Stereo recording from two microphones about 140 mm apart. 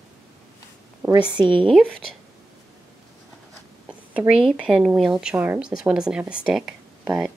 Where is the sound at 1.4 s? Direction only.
35° right (ahead or behind).